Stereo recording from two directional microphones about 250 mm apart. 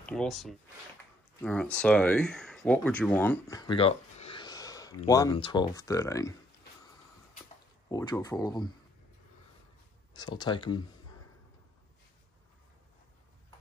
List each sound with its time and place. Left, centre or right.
0.0 s speech: centre
7.9 s speech: centre
10.1 s speech: centre